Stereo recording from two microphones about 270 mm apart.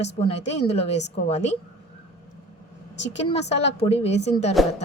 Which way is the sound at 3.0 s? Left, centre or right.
Left.